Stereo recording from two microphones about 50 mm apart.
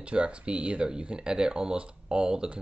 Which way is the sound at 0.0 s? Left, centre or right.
Right.